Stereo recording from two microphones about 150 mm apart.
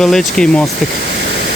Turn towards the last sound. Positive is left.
turn(degrees=5)  # may be behind; listen again after turning